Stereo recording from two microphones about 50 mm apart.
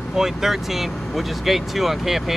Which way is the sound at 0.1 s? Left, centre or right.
Centre.